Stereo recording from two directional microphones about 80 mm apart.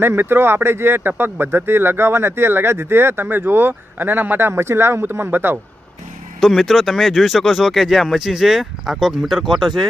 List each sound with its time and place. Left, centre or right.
0.0 s speech: right
6.4 s speech: centre